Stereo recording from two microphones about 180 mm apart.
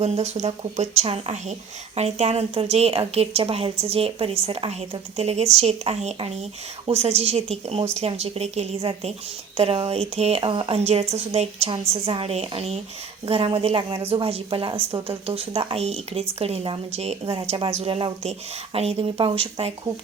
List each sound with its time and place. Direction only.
0.0 s a woman's voice: 40° right (ahead or behind)